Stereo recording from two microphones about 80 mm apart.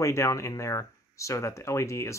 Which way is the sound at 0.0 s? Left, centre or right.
Left.